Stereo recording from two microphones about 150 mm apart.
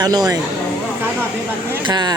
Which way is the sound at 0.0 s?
25° right (ahead or behind).